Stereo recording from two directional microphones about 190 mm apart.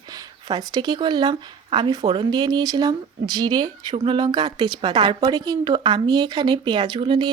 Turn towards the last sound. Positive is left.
turn(degrees=-25)  # may be behind; listen again after turning